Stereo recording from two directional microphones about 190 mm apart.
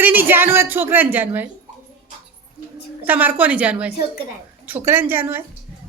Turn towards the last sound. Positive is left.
turn(degrees=-10)  # may be behind; listen again after turning